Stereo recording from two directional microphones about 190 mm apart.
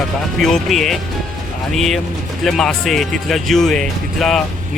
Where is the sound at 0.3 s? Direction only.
Centre (ahead or behind).